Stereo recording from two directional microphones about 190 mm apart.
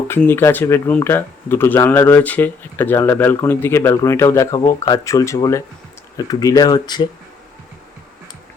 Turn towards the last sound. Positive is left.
turn(degrees=20)  # may be behind; listen again after turning